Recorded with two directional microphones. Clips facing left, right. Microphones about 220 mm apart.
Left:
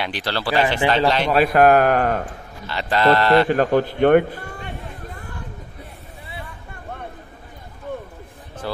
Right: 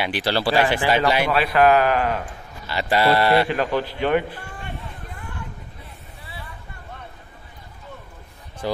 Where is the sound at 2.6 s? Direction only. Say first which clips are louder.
Left 1 dB; 10° right (ahead or behind).